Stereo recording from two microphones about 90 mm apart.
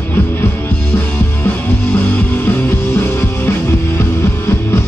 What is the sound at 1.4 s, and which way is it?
Music, 20° left (ahead or behind).